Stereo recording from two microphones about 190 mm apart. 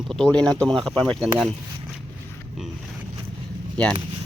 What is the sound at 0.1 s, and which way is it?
Speech, 5° left (ahead or behind).